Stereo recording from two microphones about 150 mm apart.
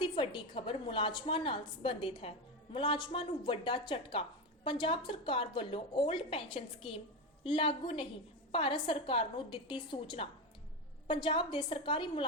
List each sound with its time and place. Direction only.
0.0 s a woman's voice: 30° left (ahead or behind)